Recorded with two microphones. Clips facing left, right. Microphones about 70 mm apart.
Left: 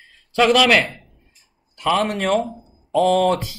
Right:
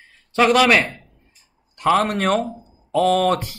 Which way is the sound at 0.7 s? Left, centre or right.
Right.